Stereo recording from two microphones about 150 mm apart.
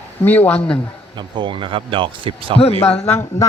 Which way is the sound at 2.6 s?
45° left (ahead or behind).